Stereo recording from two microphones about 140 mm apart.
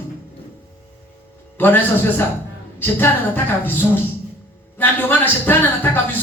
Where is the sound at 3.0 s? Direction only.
15° left (ahead or behind).